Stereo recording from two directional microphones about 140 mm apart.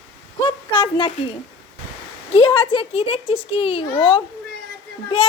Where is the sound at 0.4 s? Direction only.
35° left (ahead or behind).